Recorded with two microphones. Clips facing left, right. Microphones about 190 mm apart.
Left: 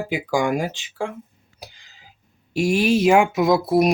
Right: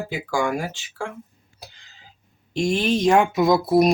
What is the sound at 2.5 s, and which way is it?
Speech, 10° left (ahead or behind).